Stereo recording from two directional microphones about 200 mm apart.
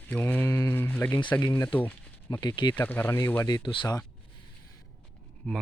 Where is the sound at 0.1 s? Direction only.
10° left (ahead or behind).